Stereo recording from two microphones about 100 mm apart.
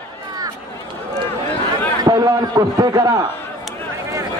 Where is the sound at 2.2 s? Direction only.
40° right (ahead or behind).